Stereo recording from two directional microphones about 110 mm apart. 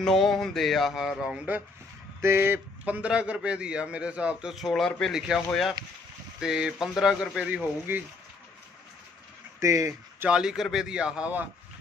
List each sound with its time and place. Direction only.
0.0 s music: 5° left (ahead or behind)
2.2 s a man's voice: 20° right (ahead or behind); by 4.9 s centre (ahead or behind)
5.0 s music: 5° right (ahead or behind)
7.4 s a man's voice: 10° right (ahead or behind)
9.6 s speech: 25° right (ahead or behind)
10.2 s a man's voice: 5° right (ahead or behind)